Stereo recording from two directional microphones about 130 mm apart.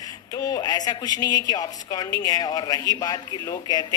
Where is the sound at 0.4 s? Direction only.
30° left (ahead or behind).